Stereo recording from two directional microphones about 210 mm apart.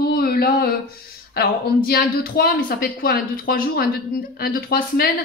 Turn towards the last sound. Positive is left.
turn(degrees=45)  # may be behind; listen again after turning